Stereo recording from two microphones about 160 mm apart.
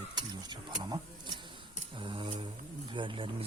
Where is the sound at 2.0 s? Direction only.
30° right (ahead or behind).